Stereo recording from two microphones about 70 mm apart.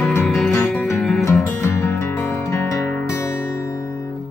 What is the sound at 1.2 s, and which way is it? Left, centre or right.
Music, left.